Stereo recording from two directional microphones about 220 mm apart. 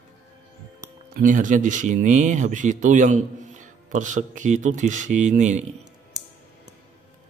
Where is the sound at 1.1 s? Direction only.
35° right (ahead or behind).